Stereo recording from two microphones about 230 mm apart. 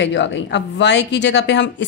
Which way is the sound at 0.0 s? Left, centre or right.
Left.